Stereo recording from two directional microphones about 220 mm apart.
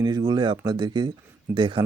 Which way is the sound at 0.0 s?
20° right (ahead or behind).